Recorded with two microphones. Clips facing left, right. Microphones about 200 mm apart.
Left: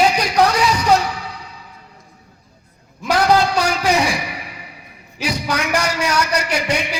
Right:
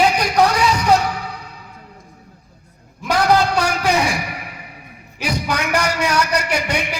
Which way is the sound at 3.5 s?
55° right (ahead or behind).